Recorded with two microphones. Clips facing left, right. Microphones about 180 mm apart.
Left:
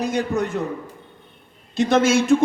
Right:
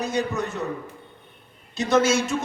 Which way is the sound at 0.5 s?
50° left (ahead or behind).